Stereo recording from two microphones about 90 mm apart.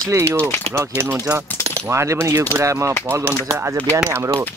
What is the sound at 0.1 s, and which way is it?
Speech, 30° right (ahead or behind).